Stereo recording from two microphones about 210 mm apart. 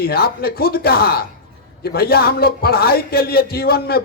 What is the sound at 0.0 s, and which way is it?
A man's voice, 45° left (ahead or behind).